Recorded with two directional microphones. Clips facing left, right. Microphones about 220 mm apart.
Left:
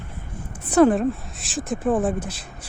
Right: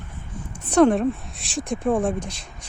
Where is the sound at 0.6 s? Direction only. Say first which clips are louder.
Even; 5° left (ahead or behind).